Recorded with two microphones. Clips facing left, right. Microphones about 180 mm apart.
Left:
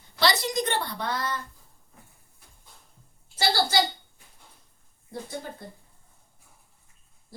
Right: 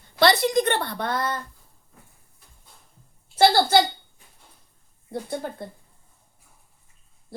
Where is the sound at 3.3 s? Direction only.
55° right (ahead or behind).